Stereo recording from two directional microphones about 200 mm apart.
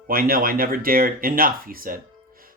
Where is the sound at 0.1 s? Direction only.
45° right (ahead or behind).